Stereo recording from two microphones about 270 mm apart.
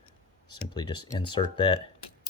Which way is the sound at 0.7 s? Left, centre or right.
Centre.